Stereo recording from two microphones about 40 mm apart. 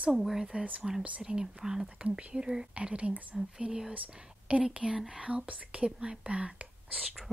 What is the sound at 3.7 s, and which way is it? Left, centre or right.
Speech, centre.